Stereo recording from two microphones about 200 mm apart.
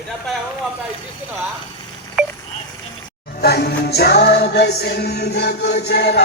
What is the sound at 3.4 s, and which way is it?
Music, 50° left (ahead or behind).